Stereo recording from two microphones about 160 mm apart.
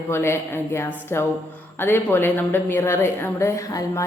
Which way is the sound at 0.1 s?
15° left (ahead or behind).